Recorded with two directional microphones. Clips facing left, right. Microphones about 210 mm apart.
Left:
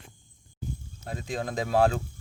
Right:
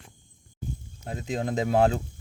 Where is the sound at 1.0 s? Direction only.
20° right (ahead or behind).